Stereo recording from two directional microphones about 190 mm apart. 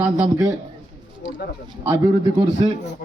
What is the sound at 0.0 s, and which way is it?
Speech, 20° right (ahead or behind).